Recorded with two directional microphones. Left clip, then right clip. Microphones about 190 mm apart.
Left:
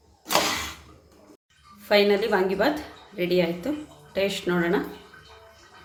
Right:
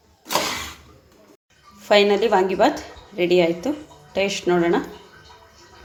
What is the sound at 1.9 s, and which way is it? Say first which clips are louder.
A woman's voice: right 4 dB; 25° right (ahead or behind).